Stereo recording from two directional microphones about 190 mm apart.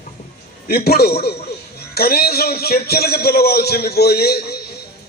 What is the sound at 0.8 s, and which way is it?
A man's voice, 55° left (ahead or behind).